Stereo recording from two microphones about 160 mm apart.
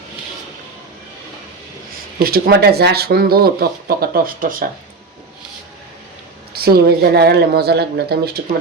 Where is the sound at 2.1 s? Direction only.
70° right (ahead or behind).